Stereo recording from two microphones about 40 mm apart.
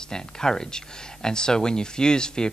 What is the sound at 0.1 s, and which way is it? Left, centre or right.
Speech, centre.